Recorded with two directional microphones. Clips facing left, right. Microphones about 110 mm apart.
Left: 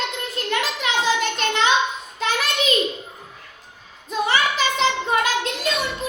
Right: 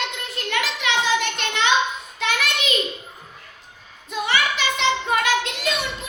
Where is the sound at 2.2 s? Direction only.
35° left (ahead or behind).